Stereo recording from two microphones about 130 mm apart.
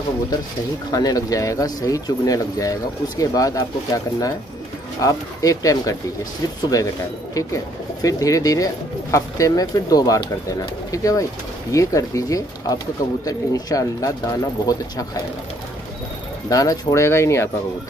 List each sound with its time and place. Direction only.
0.9 s speech: 30° left (ahead or behind)
7.3 s speech: 25° left (ahead or behind)
16.4 s speech: 25° left (ahead or behind)